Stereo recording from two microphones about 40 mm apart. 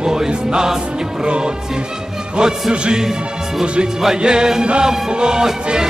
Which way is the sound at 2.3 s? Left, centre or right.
Right.